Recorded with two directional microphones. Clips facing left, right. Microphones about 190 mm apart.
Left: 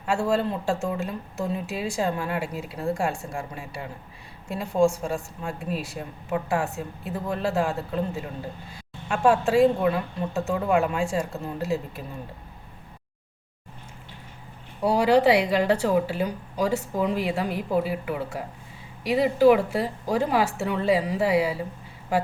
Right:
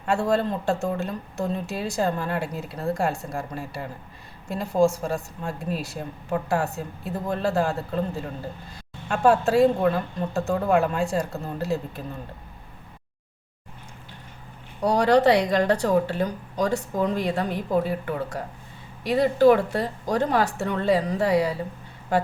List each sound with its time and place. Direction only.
0.0 s speech: 5° left (ahead or behind)
14.8 s speech: 10° left (ahead or behind)